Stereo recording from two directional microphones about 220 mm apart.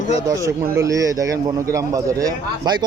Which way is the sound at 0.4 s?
15° right (ahead or behind).